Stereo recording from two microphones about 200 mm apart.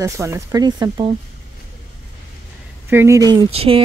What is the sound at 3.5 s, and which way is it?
Speech, 30° right (ahead or behind).